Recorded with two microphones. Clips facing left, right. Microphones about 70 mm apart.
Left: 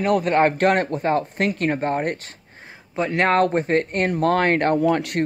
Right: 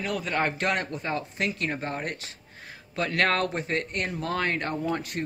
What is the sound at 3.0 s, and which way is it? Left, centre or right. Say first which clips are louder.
Speech: left 5 dB; left.